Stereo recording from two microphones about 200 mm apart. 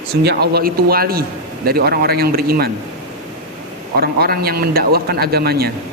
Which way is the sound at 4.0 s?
50° right (ahead or behind).